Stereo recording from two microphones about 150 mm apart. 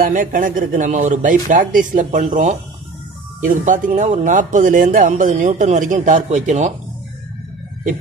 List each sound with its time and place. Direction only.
0.0 s speech: 65° right (ahead or behind)